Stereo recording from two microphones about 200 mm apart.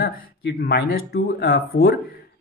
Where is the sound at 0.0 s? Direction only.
50° left (ahead or behind).